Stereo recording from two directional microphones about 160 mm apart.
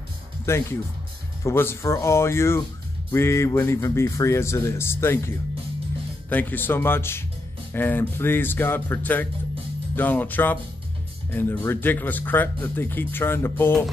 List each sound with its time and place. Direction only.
0.5 s speech: 15° left (ahead or behind)